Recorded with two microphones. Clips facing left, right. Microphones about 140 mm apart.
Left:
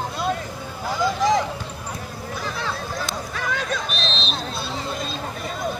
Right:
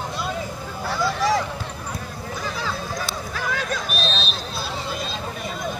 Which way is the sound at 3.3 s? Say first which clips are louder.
Even; centre (ahead or behind).